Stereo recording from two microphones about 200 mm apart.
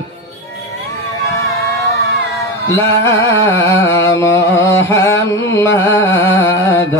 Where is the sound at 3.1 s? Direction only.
70° left (ahead or behind).